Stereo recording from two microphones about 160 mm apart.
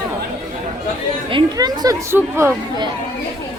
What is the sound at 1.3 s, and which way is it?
Speech, 25° right (ahead or behind).